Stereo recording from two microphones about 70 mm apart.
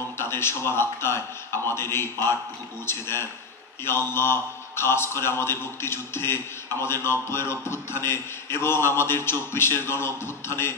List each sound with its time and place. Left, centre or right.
0.2 s a man's voice: left